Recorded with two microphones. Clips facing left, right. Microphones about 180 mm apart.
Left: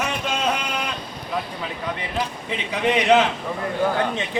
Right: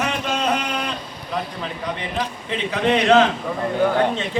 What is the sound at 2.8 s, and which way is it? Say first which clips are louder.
Speech: right 2 dB; 15° left (ahead or behind).